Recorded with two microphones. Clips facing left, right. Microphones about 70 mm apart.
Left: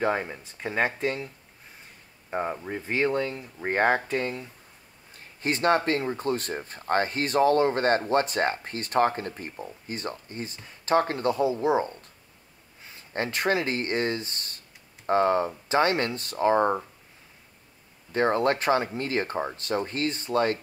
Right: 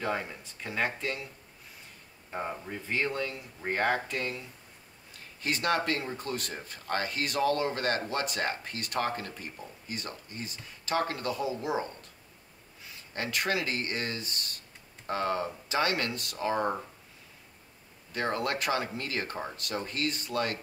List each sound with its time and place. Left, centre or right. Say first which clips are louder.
0.0 s speech: left 6 dB; left
2.3 s speech: left 6 dB; left
18.1 s speech: left 8 dB; left